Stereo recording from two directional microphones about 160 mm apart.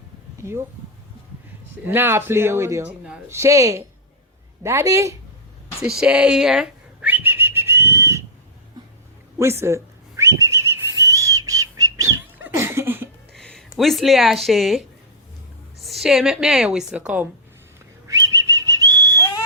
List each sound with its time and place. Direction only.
0.3 s a sound: 15° right (ahead or behind)
1.9 s a man's voice: 15° right (ahead or behind)
6.0 s whistling: 5° right (ahead or behind)
9.4 s whistling: 15° right (ahead or behind)
13.3 s a woman's voice: 5° left (ahead or behind)
18.1 s whistling: 20° right (ahead or behind)